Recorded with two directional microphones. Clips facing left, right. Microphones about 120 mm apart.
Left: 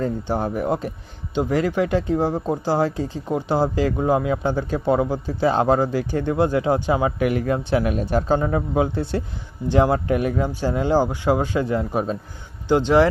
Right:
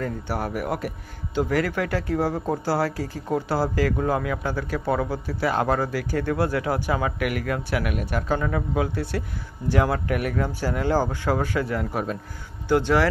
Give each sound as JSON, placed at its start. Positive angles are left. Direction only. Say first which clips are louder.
{"t": 0.0, "sound": "speech", "louder": "left 5 dB", "side_deg": 25}